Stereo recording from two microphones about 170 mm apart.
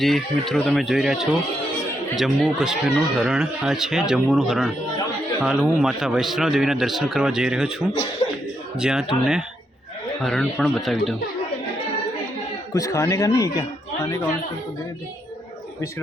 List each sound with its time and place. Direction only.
0.0 s speech: centre (ahead or behind)
8.2 s chuckle: 30° left (ahead or behind)
8.8 s speech: 5° right (ahead or behind)
12.7 s speech: 20° left (ahead or behind)